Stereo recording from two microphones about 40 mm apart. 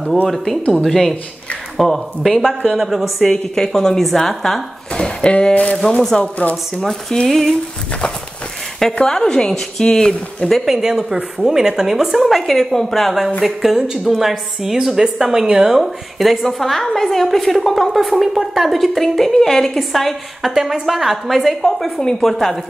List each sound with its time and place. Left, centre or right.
0.3 s a woman's voice: centre
2.7 s a woman's voice: centre
3.3 s speech: centre
4.0 s a woman's voice: centre
4.9 s speech: left
5.5 s speech: left
6.0 s speech: centre
6.5 s a woman's voice: centre
8.9 s speech: centre
10.6 s a woman's voice: centre
15.7 s a woman's voice: centre